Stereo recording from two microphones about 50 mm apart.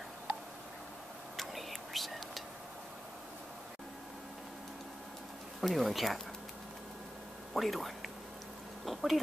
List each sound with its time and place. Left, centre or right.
1.3 s whispering: centre
5.6 s speech: centre
7.5 s speech: centre